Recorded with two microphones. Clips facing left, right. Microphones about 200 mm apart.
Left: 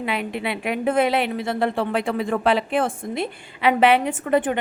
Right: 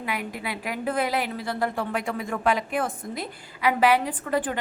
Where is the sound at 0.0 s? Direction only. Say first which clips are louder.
Left 6 dB; 25° left (ahead or behind).